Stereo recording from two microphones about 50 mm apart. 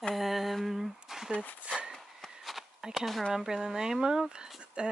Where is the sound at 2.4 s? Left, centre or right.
Centre.